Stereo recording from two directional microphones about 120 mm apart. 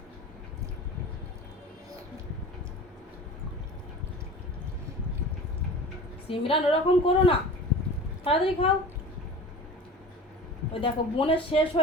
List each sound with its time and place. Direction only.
6.2 s a woman's voice: 50° left (ahead or behind)
10.8 s a woman's voice: 45° left (ahead or behind)